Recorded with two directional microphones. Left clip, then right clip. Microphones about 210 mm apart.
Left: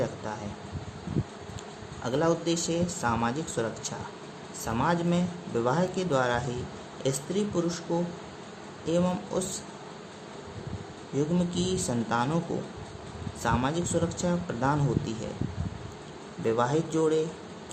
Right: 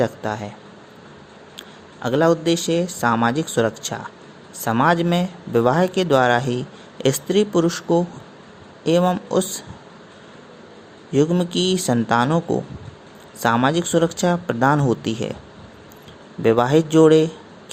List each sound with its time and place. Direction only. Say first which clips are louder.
2.0 s speech: right 9 dB; 30° right (ahead or behind)
11.1 s speech: right 11 dB; 35° right (ahead or behind)
13.4 s speech: right 10 dB; 35° right (ahead or behind)
16.4 s speech: right 10 dB; 35° right (ahead or behind)